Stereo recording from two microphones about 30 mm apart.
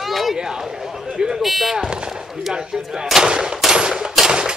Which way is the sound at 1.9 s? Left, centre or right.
Right.